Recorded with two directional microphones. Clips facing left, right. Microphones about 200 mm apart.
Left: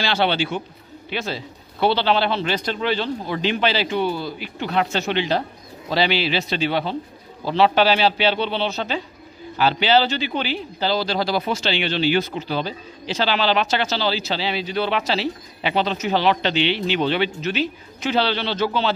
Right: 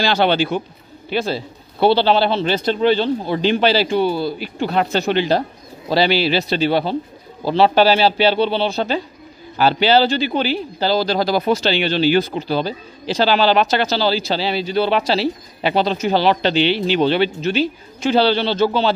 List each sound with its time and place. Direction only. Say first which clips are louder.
0.0 s a man's voice: right 5 dB; 45° right (ahead or behind)